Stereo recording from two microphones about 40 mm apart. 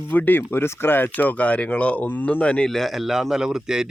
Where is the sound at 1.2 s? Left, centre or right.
Left.